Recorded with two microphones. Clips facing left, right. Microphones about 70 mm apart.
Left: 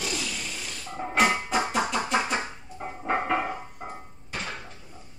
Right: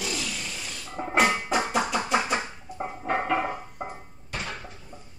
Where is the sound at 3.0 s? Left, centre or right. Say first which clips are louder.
Even; centre.